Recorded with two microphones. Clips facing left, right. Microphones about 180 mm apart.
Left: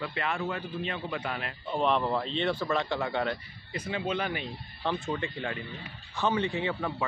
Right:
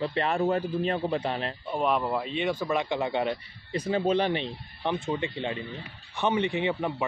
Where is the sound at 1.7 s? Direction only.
10° right (ahead or behind).